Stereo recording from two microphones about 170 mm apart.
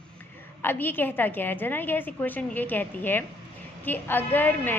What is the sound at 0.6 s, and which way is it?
A woman's voice, 10° left (ahead or behind).